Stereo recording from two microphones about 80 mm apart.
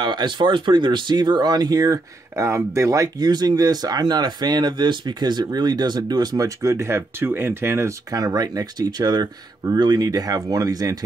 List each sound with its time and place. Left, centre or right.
0.0 s speech: right
2.3 s speech: right
3.2 s speech: right
8.2 s speech: right